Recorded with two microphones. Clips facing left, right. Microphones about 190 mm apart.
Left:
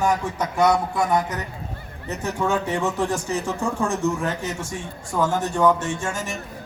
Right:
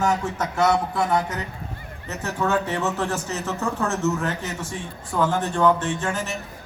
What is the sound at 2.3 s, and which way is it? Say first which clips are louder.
Speech: even; 10° left (ahead or behind).